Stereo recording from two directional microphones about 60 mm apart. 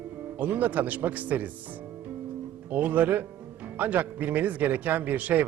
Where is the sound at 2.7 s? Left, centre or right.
Right.